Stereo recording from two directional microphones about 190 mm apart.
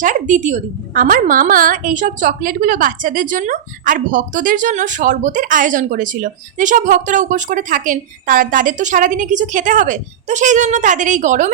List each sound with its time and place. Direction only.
0.0 s a woman's voice: 40° right (ahead or behind)